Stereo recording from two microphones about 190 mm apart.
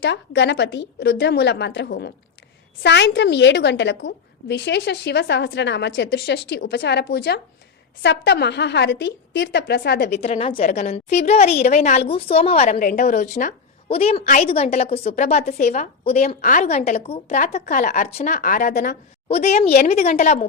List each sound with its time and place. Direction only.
0.0 s a woman's voice: 65° left (ahead or behind)
10.2 s a woman's voice: 35° left (ahead or behind)
19.3 s a woman's voice: 35° left (ahead or behind)